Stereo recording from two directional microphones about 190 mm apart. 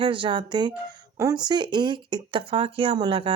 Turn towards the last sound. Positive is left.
turn(degrees=-25)  # may be behind; listen again after turning